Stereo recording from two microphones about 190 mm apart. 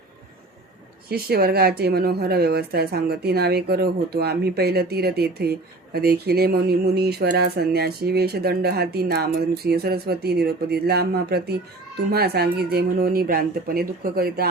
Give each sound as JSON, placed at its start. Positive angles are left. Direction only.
{"t": 1.1, "sound": "a woman's voice", "side_deg": -55}